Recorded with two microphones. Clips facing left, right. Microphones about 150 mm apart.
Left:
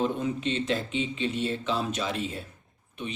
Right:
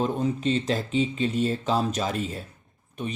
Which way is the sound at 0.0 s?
40° right (ahead or behind).